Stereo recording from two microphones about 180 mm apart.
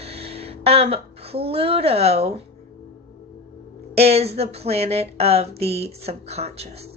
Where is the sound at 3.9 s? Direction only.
35° right (ahead or behind).